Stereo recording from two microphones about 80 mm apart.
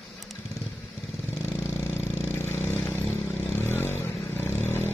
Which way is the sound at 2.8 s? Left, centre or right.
Left.